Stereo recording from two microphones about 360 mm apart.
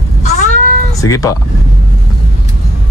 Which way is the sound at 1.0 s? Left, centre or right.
Centre.